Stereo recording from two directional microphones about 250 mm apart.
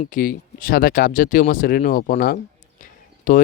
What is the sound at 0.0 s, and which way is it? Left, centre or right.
Speech, left.